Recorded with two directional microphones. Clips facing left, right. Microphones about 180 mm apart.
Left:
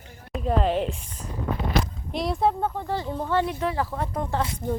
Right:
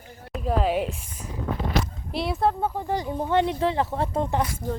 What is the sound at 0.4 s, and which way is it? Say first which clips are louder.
A woman's voice: even; 5° right (ahead or behind).